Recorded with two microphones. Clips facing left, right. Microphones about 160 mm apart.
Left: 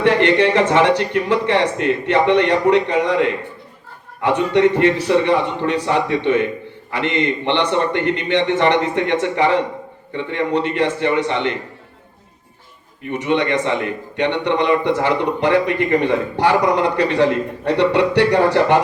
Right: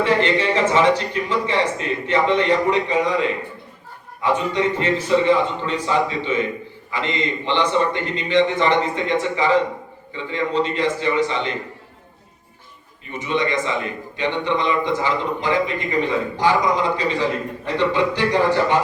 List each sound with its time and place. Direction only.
0.0 s a man's voice: 65° left (ahead or behind)
13.1 s a man's voice: 65° left (ahead or behind)